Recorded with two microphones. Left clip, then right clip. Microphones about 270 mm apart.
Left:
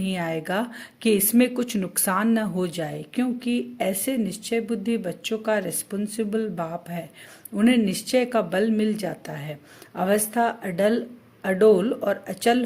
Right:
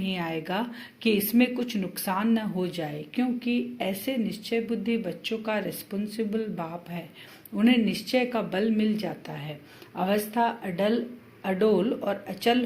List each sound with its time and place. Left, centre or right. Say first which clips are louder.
0.0 s speech: left 3 dB; left